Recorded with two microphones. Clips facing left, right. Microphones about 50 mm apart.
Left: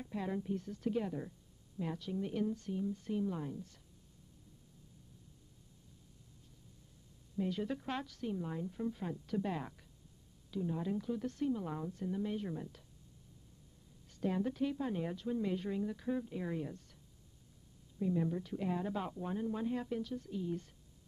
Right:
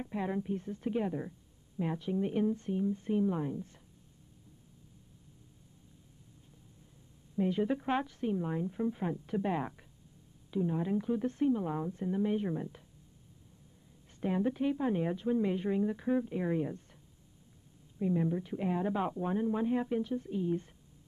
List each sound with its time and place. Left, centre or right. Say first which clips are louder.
0.0 s a woman's voice: right 4 dB; right
7.3 s a woman's voice: right 7 dB; right
14.2 s a woman's voice: right 4 dB; right
17.9 s a woman's voice: right 4 dB; right